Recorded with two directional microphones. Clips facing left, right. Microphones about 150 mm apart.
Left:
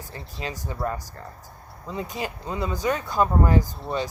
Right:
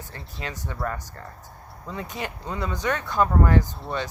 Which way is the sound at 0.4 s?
25° left (ahead or behind).